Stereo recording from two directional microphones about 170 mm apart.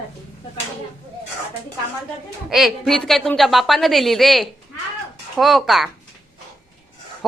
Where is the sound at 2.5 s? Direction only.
Centre (ahead or behind).